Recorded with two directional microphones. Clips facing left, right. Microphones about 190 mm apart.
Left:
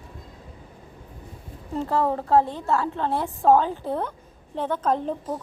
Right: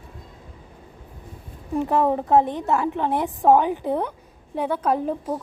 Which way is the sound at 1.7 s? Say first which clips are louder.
Right 3 dB; 15° right (ahead or behind).